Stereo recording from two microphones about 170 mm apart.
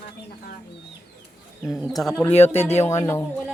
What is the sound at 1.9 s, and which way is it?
Speech, centre (ahead or behind).